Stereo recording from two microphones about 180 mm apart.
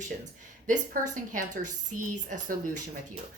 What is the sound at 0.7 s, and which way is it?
Speech, 45° right (ahead or behind).